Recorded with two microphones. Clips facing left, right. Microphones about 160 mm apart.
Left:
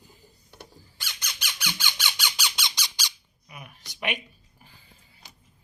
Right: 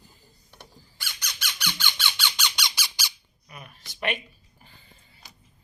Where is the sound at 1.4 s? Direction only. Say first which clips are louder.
Right 1 dB; 15° left (ahead or behind).